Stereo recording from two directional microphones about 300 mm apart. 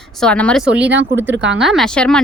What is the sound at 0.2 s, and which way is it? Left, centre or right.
Speech, centre.